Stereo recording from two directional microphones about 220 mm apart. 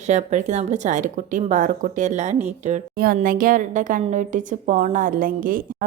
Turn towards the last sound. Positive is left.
turn(degrees=-40)  # may be behind; listen again after turning